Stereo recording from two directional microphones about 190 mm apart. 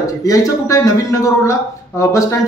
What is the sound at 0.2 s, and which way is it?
Speech, 15° left (ahead or behind).